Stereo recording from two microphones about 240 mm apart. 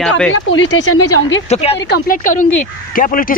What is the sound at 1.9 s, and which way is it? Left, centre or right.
Speech, left.